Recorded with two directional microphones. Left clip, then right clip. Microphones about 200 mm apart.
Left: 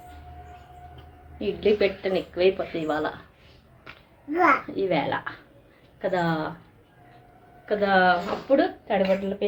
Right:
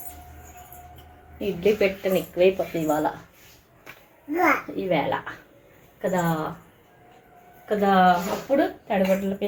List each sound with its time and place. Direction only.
1.4 s speech: 5° right (ahead or behind)
4.4 s a woman's voice: centre (ahead or behind)
7.8 s a woman's voice: centre (ahead or behind)